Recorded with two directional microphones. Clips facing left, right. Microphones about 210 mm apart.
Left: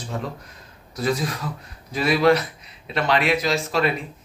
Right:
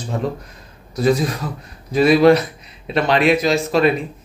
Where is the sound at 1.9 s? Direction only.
25° right (ahead or behind).